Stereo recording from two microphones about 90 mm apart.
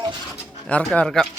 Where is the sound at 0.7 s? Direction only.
15° left (ahead or behind).